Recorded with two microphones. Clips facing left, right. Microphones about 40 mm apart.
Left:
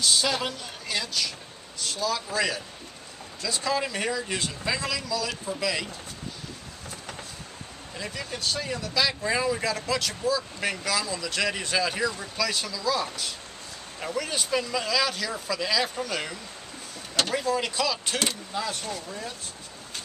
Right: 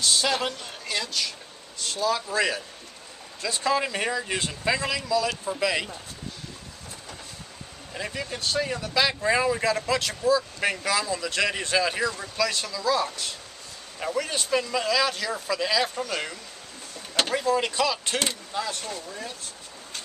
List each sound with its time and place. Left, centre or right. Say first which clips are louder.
0.0 s speech: right 1 dB; centre
7.9 s speech: right 3 dB; centre